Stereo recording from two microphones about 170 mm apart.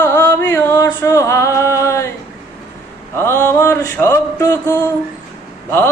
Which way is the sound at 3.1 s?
15° left (ahead or behind).